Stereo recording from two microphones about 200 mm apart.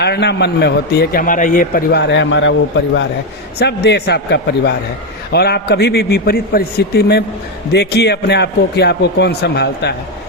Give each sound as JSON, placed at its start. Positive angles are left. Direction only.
{"t": 0.0, "sound": "a man's voice", "side_deg": 55}